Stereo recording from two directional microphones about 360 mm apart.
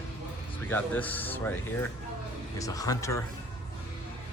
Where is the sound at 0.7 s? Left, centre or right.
Centre.